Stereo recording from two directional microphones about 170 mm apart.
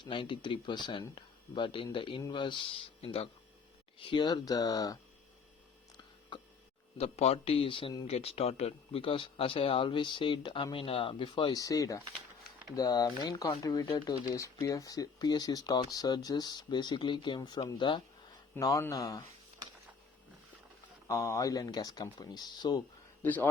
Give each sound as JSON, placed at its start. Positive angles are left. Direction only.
{"t": 0.0, "sound": "speech", "side_deg": 30}
{"t": 7.0, "sound": "speech", "side_deg": 35}
{"t": 18.5, "sound": "speech", "side_deg": 15}
{"t": 21.1, "sound": "speech", "side_deg": 20}
{"t": 23.2, "sound": "a man's voice", "side_deg": 10}